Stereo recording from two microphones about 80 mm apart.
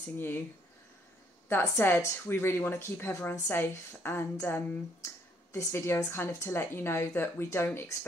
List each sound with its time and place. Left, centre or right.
1.6 s speech: left